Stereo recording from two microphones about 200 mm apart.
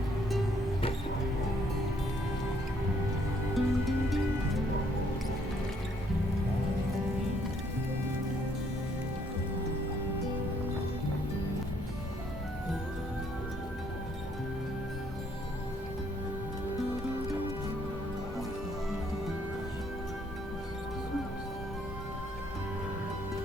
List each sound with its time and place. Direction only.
3.5 s music: centre (ahead or behind)